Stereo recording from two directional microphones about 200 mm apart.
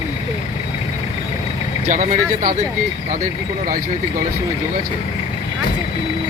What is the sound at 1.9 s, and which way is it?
Speech, 40° right (ahead or behind).